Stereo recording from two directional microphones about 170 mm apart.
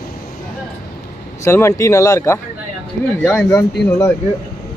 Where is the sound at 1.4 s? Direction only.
15° left (ahead or behind).